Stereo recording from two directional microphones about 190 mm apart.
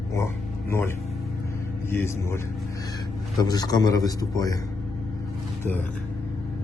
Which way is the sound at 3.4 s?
20° left (ahead or behind).